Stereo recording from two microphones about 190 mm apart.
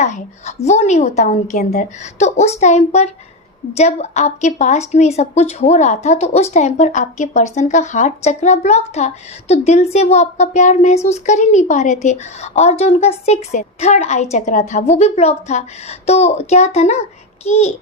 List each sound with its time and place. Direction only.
0.0 s a woman's voice: 35° left (ahead or behind)